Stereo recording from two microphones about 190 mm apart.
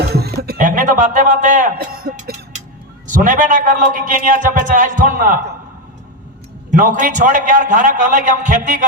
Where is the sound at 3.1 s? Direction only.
45° right (ahead or behind).